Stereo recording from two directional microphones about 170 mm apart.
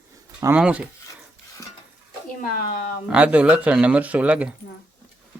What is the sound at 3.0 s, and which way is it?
Speech, 10° right (ahead or behind).